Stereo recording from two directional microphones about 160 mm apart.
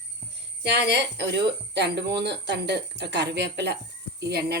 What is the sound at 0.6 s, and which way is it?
Speech, 90° right.